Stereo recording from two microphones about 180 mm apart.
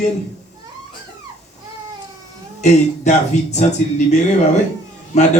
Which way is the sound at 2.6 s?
40° left (ahead or behind).